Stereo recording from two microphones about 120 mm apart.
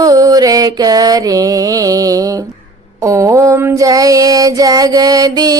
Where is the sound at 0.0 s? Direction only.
30° right (ahead or behind).